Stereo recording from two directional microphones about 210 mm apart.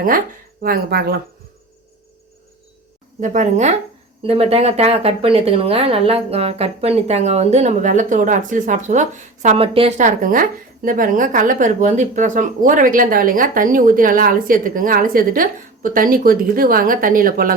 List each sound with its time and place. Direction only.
0.6 s speech: 45° right (ahead or behind)
3.2 s speech: 35° right (ahead or behind)